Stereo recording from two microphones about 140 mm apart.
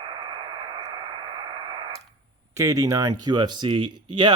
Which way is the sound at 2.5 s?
25° right (ahead or behind).